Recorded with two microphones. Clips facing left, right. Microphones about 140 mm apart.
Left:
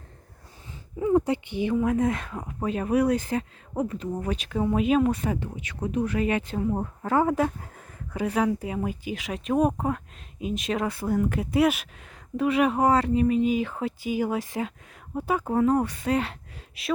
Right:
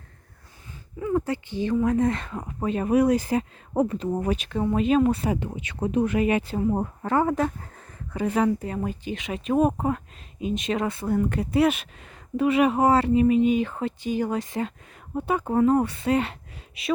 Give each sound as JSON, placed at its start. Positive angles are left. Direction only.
{"t": 0.9, "sound": "speech", "side_deg": 15}
{"t": 1.8, "sound": "speech", "side_deg": 5}
{"t": 3.8, "sound": "speech", "side_deg": -30}
{"t": 4.4, "sound": "speech", "side_deg": 5}
{"t": 5.2, "sound": "speech", "side_deg": -10}
{"t": 5.5, "sound": "speech", "side_deg": -25}
{"t": 6.1, "sound": "speech", "side_deg": -5}
{"t": 7.0, "sound": "speech", "side_deg": 5}